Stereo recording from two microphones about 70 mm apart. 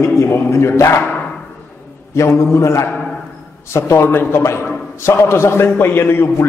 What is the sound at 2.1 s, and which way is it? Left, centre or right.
A man's voice, left.